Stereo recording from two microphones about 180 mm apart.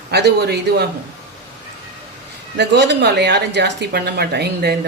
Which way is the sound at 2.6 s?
75° right (ahead or behind).